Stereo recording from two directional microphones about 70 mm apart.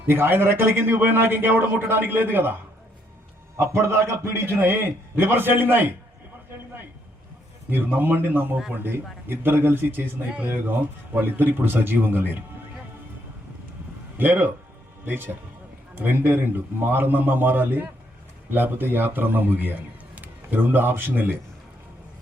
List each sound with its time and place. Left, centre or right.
0.1 s a man's voice: right
3.6 s a man's voice: right
7.7 s a man's voice: right
14.2 s a man's voice: right